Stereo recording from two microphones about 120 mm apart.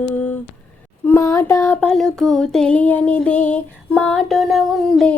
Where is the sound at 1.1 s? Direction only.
20° left (ahead or behind).